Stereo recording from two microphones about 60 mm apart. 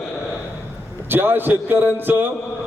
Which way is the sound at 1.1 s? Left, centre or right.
Right.